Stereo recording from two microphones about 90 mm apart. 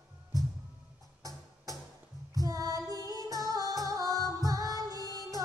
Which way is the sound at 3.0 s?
40° right (ahead or behind).